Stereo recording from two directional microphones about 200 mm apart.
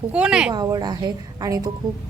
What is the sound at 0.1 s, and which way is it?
Speech, 5° right (ahead or behind).